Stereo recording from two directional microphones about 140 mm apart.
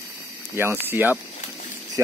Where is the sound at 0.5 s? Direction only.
15° right (ahead or behind).